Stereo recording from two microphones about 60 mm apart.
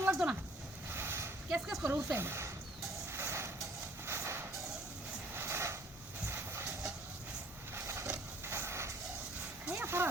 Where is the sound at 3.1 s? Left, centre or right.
Right.